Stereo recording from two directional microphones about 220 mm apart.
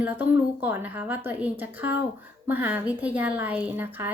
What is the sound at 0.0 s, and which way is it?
Speech, 10° right (ahead or behind).